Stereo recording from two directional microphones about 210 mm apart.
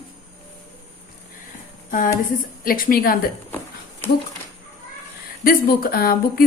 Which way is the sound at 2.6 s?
45° left (ahead or behind).